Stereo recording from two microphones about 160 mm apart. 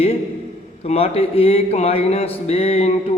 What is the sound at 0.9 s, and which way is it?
Speech, 40° left (ahead or behind).